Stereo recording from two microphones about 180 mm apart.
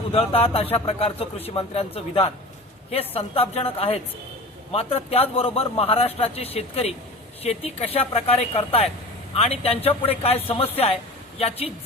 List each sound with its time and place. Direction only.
0.1 s a man's voice: 30° left (ahead or behind)